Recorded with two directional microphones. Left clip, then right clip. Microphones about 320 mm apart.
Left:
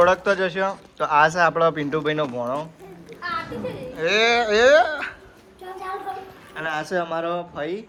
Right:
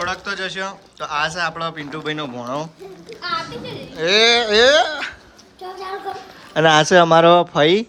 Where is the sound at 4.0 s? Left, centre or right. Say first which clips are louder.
Right 4 dB; centre.